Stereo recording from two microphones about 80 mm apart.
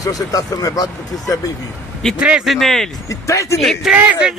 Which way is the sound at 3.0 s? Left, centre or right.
Left.